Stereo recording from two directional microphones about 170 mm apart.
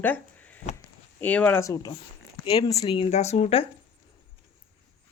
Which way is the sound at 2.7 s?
30° left (ahead or behind).